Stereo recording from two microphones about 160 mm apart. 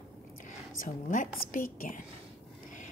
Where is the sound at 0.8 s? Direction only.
55° left (ahead or behind).